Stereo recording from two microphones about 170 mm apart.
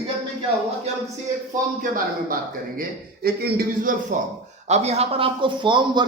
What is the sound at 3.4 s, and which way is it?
Speech, 55° right (ahead or behind).